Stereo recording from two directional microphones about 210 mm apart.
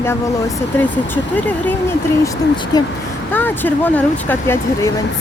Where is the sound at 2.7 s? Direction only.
20° left (ahead or behind).